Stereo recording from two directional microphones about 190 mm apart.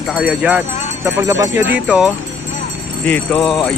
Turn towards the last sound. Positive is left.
turn(degrees=0)  # may be behind; listen again after turning